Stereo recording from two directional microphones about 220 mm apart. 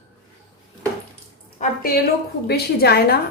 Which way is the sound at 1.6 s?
40° left (ahead or behind).